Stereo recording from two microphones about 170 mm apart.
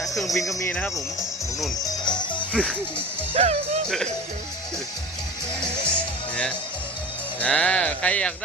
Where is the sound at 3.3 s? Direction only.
35° right (ahead or behind).